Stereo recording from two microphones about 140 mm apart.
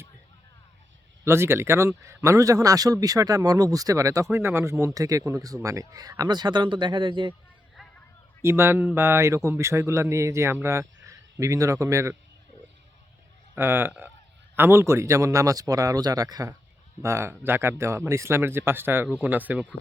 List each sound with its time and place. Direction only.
1.2 s speech: 20° right (ahead or behind); by 7.3 s 35° right (ahead or behind)
8.4 s speech: 20° right (ahead or behind)
13.6 s speech: 15° right (ahead or behind)